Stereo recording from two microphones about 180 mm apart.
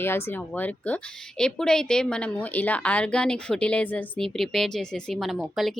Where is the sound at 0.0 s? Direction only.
10° left (ahead or behind).